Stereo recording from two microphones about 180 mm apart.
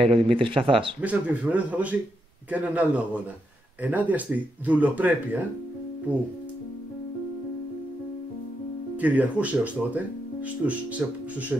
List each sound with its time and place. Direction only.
0.0 s speech: 30° right (ahead or behind)
1.0 s speech: 10° right (ahead or behind)
8.9 s speech: 10° right (ahead or behind)